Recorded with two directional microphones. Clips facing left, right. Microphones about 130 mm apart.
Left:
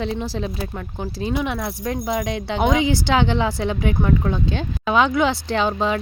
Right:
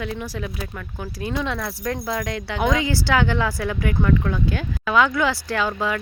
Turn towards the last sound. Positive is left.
turn(degrees=25)  # may be behind; listen again after turning